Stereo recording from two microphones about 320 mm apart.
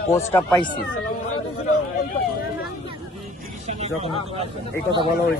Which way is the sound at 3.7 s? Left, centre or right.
Centre.